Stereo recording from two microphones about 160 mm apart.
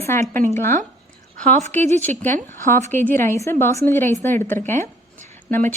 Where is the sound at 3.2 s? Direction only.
15° left (ahead or behind).